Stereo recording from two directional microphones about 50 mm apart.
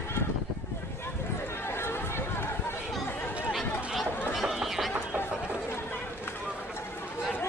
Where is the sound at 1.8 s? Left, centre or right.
Left.